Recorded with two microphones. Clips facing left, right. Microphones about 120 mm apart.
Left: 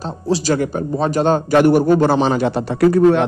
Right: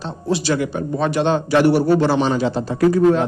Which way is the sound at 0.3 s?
40° left (ahead or behind).